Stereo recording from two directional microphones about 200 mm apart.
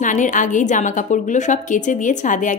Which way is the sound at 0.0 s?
40° left (ahead or behind).